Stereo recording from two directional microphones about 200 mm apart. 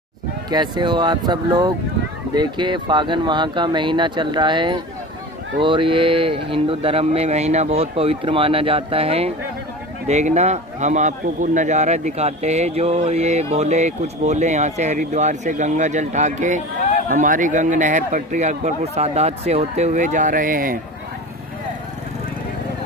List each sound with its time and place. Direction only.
0.5 s a man's voice: 20° right (ahead or behind); by 20.7 s 45° right (ahead or behind)